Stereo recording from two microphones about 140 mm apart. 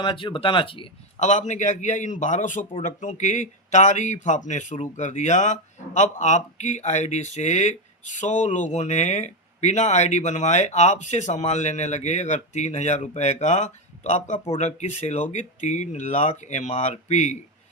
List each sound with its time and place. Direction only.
0.0 s speech: 35° left (ahead or behind)
1.2 s speech: 55° left (ahead or behind)